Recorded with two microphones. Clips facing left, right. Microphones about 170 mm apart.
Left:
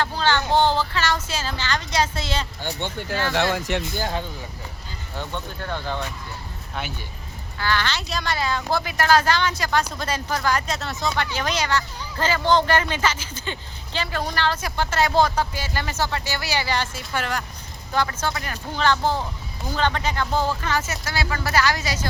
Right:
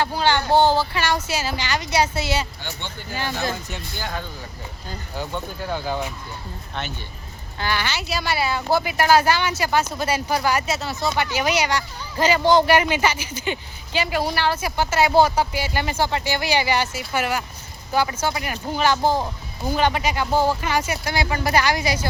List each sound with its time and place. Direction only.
0.0 s speech: 10° right (ahead or behind)
2.6 s speech: 45° left (ahead or behind)
3.3 s speech: 85° left
5.1 s speech: 5° right (ahead or behind)
7.6 s speech: 15° right (ahead or behind)